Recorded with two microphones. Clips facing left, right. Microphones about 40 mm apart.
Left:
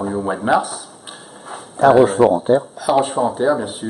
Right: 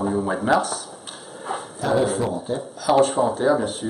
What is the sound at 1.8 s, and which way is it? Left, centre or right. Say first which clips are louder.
Speech: left 11 dB; left.